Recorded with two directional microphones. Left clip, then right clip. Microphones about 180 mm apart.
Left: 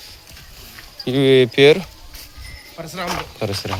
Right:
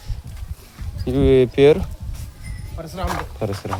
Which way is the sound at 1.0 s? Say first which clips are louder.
Left 2 dB; centre (ahead or behind).